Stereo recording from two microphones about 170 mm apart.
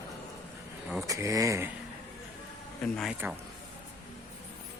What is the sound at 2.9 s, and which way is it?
Speech, centre (ahead or behind).